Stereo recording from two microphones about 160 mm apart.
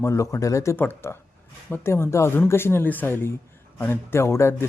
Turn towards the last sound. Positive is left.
turn(degrees=15)  # may be behind; listen again after turning